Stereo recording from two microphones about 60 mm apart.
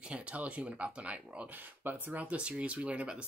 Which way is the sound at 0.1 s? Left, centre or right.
Right.